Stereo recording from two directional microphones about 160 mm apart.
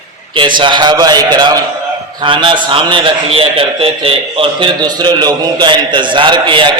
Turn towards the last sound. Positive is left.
turn(degrees=-30)  # may be behind; listen again after turning